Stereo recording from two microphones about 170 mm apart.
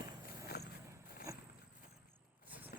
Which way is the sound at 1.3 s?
20° right (ahead or behind).